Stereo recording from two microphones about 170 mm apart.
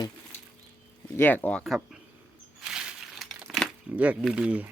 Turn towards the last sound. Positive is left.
turn(degrees=-10)  # may be behind; listen again after turning